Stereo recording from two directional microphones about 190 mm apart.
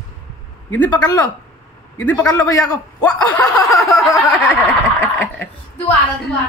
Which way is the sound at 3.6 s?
20° left (ahead or behind).